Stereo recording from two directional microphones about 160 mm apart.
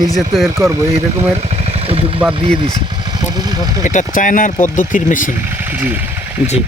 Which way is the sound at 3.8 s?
50° left (ahead or behind).